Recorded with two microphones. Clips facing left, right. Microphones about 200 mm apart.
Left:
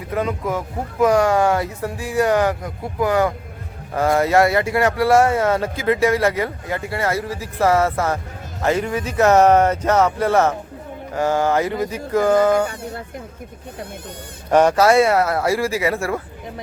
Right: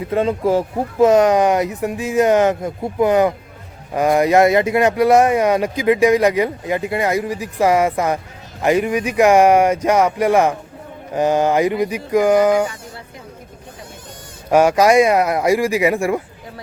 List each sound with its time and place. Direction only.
0.1 s speech: 30° right (ahead or behind)
12.6 s speech: 60° left (ahead or behind)
14.5 s speech: 10° right (ahead or behind)